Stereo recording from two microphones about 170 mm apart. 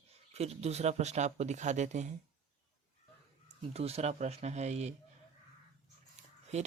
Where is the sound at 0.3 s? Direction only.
40° right (ahead or behind).